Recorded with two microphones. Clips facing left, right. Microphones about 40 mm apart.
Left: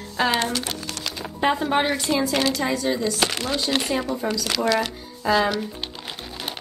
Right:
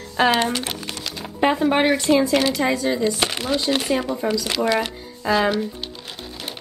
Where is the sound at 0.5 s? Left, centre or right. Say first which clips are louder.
Right 2 dB; right.